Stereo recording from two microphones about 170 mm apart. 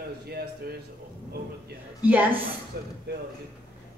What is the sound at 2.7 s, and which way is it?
Speech, 70° right (ahead or behind).